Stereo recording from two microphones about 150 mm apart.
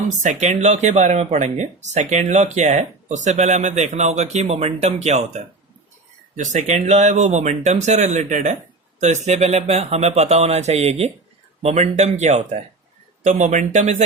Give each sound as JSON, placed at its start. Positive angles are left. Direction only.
{"t": 0.1, "sound": "speech", "side_deg": -55}